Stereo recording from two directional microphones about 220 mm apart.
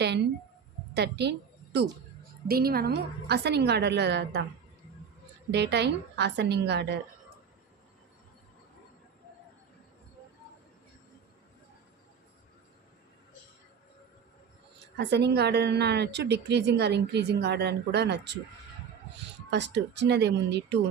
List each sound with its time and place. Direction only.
0.9 s a woman's voice: 50° right (ahead or behind)
5.5 s a woman's voice: 50° right (ahead or behind)
14.9 s a woman's voice: 50° right (ahead or behind)
19.5 s a woman's voice: 50° right (ahead or behind)